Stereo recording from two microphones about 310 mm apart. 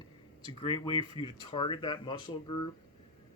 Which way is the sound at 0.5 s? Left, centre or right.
Centre.